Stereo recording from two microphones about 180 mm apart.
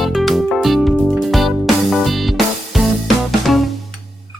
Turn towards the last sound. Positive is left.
turn(degrees=0)  # may be behind; listen again after turning